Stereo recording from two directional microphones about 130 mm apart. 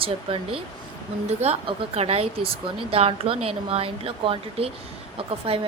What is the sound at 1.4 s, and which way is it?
Speech, 50° right (ahead or behind).